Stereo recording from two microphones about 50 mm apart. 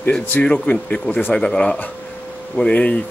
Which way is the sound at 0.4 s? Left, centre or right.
Left.